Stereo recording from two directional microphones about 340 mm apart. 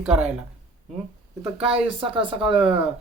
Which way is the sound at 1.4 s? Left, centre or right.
Centre.